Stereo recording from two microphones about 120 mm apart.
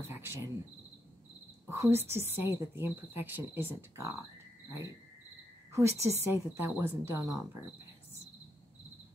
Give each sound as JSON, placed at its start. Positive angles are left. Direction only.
{"t": 0.1, "sound": "cricket", "side_deg": -20}
{"t": 1.7, "sound": "speech", "side_deg": -20}
{"t": 5.7, "sound": "speech", "side_deg": -25}